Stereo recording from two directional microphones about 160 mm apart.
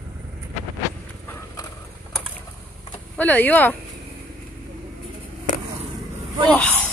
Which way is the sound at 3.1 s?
10° left (ahead or behind).